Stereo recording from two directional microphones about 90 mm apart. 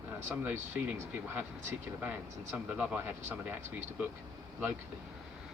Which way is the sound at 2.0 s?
20° right (ahead or behind).